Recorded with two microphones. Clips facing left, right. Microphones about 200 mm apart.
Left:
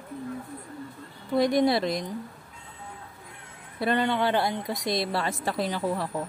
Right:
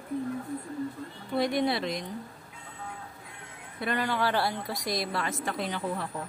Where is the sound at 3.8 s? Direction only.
25° left (ahead or behind).